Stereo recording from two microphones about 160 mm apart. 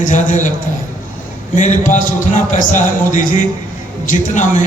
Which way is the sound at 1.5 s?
50° left (ahead or behind).